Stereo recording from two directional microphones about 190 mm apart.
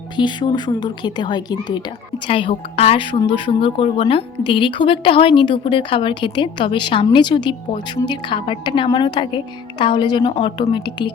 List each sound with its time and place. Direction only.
0.2 s a woman's voice: 25° left (ahead or behind)